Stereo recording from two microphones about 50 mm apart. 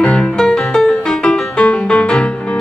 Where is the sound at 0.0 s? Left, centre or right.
Centre.